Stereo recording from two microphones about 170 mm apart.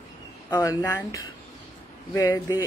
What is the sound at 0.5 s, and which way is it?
Speech, 20° left (ahead or behind).